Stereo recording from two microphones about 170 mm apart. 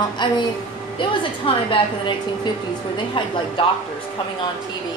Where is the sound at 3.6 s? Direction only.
30° left (ahead or behind).